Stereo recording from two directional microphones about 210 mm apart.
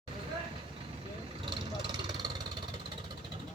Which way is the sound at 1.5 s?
20° right (ahead or behind).